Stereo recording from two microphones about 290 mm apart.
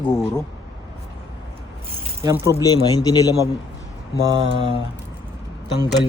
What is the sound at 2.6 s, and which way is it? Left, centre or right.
Speech, centre.